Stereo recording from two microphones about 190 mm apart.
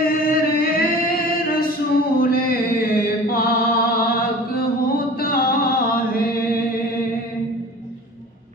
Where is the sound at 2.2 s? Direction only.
50° left (ahead or behind).